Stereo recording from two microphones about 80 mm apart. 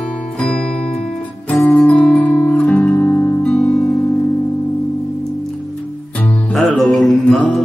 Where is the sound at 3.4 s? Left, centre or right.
Centre.